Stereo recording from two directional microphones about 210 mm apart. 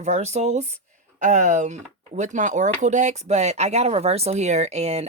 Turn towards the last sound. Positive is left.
turn(degrees=-30)  # may be behind; listen again after turning